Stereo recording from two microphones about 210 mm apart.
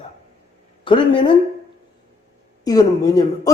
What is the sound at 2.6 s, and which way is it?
Speech, 20° left (ahead or behind).